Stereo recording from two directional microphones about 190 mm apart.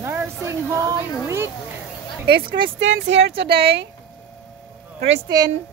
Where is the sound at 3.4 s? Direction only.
60° right (ahead or behind).